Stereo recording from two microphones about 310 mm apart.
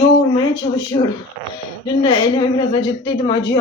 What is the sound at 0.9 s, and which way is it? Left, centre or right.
A woman's voice, centre.